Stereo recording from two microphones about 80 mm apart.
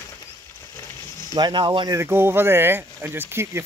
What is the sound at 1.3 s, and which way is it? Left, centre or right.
Speech, right.